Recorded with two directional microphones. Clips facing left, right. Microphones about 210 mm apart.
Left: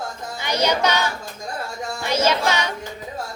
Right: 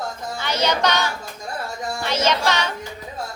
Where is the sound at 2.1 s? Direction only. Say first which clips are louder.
Left 1 dB; 10° left (ahead or behind).